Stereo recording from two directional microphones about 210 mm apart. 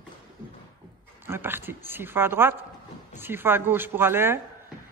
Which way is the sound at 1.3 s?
10° right (ahead or behind).